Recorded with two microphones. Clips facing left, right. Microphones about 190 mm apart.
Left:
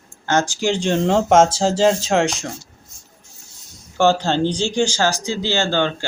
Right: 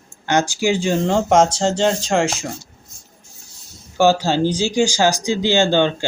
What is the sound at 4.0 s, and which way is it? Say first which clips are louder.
Speech: right 1 dB; 10° right (ahead or behind).